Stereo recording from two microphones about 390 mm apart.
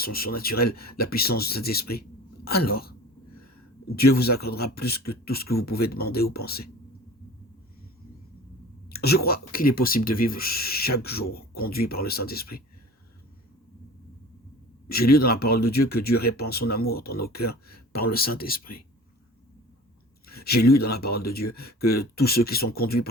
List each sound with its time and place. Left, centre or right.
0.0 s speech: left
8.9 s speech: left
14.8 s speech: left
20.2 s speech: left